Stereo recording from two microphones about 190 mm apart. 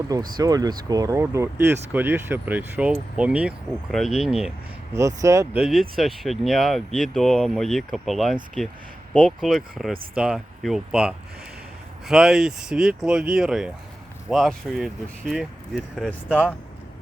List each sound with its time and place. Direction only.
0.3 s speech: 20° right (ahead or behind); by 4.5 s 5° right (ahead or behind)
4.9 s speech: 15° right (ahead or behind)
5.5 s speech: 5° right (ahead or behind)